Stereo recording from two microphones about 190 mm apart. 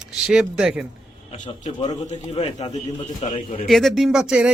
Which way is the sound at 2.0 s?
35° left (ahead or behind).